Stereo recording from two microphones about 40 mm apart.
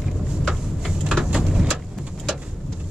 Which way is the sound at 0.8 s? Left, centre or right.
Centre.